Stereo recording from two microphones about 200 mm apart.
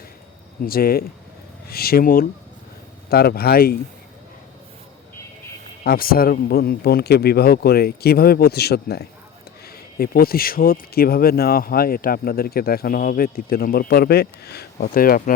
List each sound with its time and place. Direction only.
0.6 s speech: 50° left (ahead or behind)
5.8 s speech: 50° left (ahead or behind)